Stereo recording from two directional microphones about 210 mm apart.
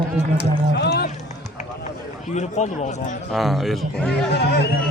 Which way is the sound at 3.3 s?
Centre (ahead or behind).